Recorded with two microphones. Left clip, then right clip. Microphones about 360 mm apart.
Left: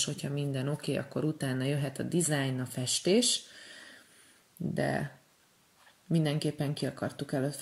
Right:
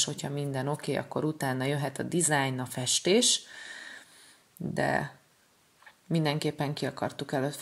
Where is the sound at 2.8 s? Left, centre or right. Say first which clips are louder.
Right 3 dB; centre.